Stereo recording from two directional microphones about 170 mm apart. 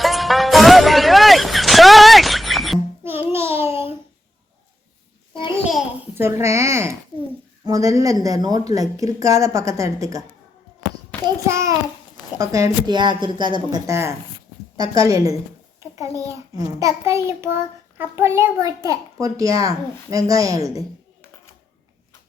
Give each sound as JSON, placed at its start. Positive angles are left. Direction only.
{"t": 0.0, "sound": "music", "side_deg": 0}
{"t": 3.0, "sound": "child singing", "side_deg": -15}
{"t": 6.1, "sound": "a child's voice", "side_deg": -15}
{"t": 11.4, "sound": "a child's voice", "side_deg": -15}